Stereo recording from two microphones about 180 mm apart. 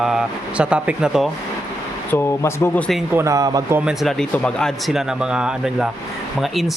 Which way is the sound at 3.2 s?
20° right (ahead or behind).